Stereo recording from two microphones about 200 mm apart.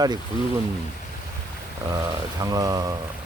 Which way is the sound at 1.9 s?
15° right (ahead or behind).